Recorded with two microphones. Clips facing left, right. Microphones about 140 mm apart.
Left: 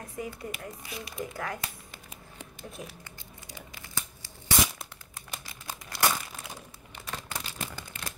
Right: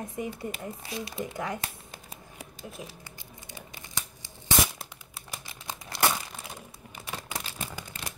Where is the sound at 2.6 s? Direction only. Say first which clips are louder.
Right 1 dB; 5° right (ahead or behind).